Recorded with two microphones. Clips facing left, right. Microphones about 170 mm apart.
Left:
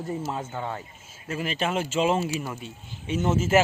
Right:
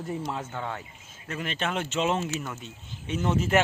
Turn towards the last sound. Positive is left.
turn(degrees=5)  # may be behind; listen again after turning